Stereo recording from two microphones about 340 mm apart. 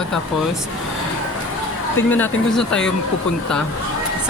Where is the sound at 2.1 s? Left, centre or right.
Centre.